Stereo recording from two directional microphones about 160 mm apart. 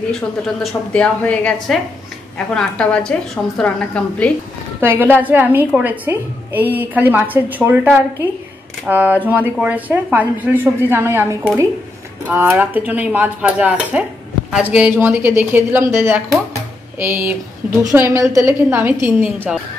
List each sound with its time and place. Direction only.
0.1 s a woman's voice: centre (ahead or behind)
4.7 s a woman's voice: 15° right (ahead or behind)
12.3 s a woman's voice: 10° right (ahead or behind)